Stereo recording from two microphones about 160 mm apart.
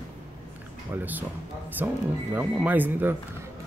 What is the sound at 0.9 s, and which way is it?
Speech, 10° right (ahead or behind).